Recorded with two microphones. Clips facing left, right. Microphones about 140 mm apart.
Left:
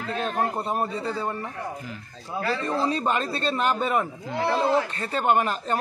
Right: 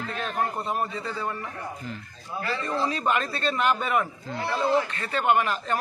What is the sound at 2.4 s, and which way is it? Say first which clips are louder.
A man's voice: left 2 dB; 30° left (ahead or behind).